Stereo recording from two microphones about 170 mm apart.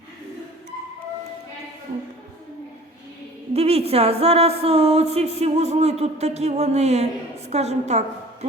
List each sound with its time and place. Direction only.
3.5 s speech: 35° right (ahead or behind)